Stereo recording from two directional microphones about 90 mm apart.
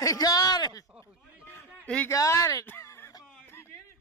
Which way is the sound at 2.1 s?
35° left (ahead or behind).